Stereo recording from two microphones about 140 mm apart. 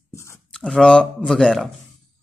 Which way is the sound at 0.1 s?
20° left (ahead or behind).